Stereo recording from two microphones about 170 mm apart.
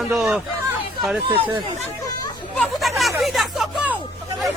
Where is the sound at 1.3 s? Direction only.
30° right (ahead or behind).